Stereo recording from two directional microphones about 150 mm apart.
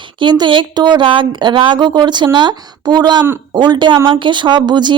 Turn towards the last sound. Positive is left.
turn(degrees=-30)  # may be behind; listen again after turning